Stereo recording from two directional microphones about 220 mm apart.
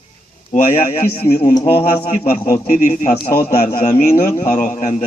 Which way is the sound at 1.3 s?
30° left (ahead or behind).